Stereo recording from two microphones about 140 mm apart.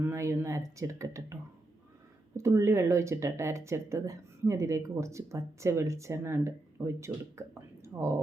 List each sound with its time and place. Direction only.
0.0 s speech: 20° right (ahead or behind)
2.4 s speech: 20° right (ahead or behind)